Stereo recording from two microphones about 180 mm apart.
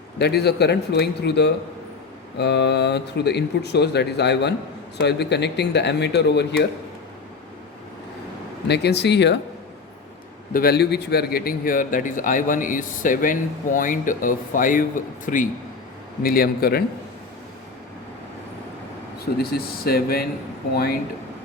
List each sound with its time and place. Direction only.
0.2 s speech: 65° left (ahead or behind)
8.6 s speech: 70° left (ahead or behind)
10.5 s a man's voice: 60° left (ahead or behind)
19.2 s speech: 60° left (ahead or behind)